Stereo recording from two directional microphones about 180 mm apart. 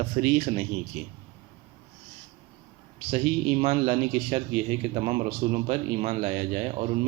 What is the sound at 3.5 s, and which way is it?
Speech, 30° right (ahead or behind).